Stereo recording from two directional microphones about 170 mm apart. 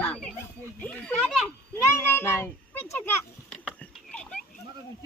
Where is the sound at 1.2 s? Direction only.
5° right (ahead or behind).